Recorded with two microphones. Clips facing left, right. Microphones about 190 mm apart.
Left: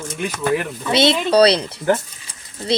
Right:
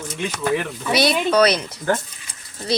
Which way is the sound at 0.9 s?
25° left (ahead or behind).